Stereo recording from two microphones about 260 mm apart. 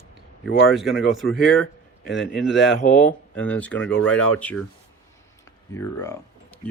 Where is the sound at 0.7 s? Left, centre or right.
Centre.